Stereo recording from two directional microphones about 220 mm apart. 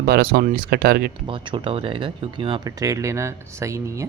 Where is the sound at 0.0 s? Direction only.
45° right (ahead or behind).